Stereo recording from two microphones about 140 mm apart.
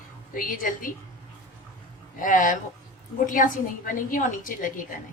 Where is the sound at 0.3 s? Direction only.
75° left (ahead or behind).